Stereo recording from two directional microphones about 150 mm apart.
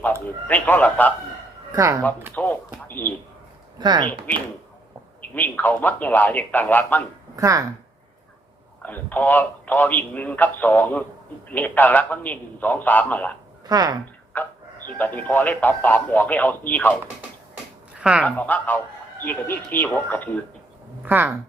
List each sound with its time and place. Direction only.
0.0 s a man's voice: 10° left (ahead or behind)
1.7 s speech: 20° right (ahead or behind)
2.3 s a man's voice: 10° left (ahead or behind)
3.8 s speech: 30° right (ahead or behind)
5.3 s a man's voice: 10° left (ahead or behind)
7.3 s speech: 20° right (ahead or behind)
8.8 s a man's voice: 10° left (ahead or behind)
13.7 s speech: 25° right (ahead or behind)
14.3 s chicken: 10° left (ahead or behind)
14.9 s a man's voice: 10° left (ahead or behind)
18.0 s speech: 5° right (ahead or behind)
18.3 s a man's voice: 10° left (ahead or behind)
21.0 s speech: 10° right (ahead or behind)